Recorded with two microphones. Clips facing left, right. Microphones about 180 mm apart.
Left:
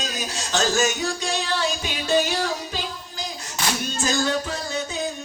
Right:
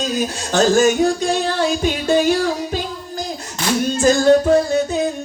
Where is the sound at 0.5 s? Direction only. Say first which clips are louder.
Right 9 dB; 55° right (ahead or behind).